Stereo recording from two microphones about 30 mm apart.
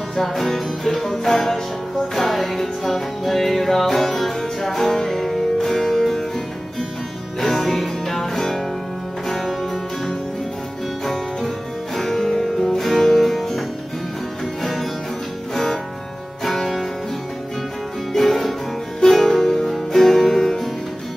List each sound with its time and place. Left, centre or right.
0.1 s music: centre
7.3 s music: centre
11.1 s music: centre
18.1 s music: centre